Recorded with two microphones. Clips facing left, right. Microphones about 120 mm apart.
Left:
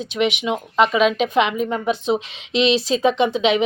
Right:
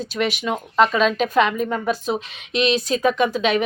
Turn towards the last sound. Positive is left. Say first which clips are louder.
# left 2 dB
turn(degrees=20)  # may be behind; listen again after turning